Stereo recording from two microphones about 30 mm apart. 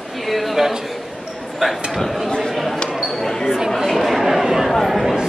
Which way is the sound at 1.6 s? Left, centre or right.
Centre.